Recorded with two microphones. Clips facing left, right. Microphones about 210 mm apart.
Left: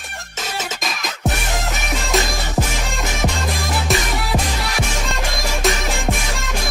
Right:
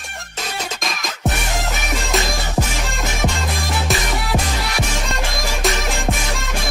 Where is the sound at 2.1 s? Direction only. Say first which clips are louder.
Left 1 dB; centre (ahead or behind).